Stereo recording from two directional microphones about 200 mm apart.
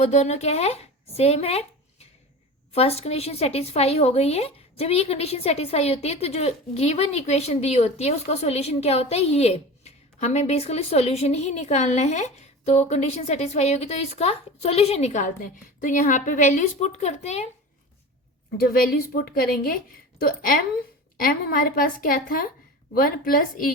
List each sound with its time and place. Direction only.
0.0 s speech: 35° left (ahead or behind)
18.5 s a woman's voice: 50° left (ahead or behind)